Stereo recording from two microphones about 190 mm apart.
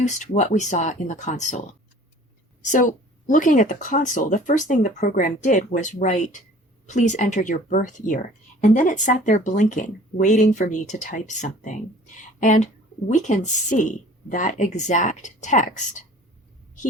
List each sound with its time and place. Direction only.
0.0 s speech: 40° left (ahead or behind)
2.6 s speech: 40° left (ahead or behind)